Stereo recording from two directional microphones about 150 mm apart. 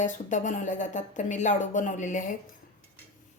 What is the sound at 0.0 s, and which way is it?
Speech, 55° left (ahead or behind).